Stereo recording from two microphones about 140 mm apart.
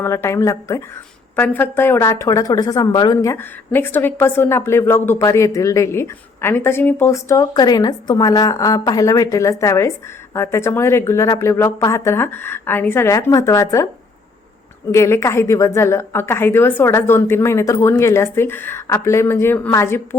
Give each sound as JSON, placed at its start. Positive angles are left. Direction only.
{"t": 0.0, "sound": "a woman's voice", "side_deg": 20}
{"t": 14.9, "sound": "a woman's voice", "side_deg": 20}